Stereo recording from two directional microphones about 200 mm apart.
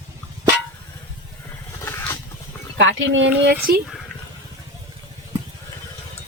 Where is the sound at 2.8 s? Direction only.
70° right (ahead or behind).